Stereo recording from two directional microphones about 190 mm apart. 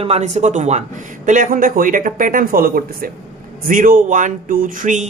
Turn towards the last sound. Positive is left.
turn(degrees=-40)  # may be behind; listen again after turning